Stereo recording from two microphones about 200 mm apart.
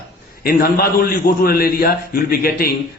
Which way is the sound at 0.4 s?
50° left (ahead or behind).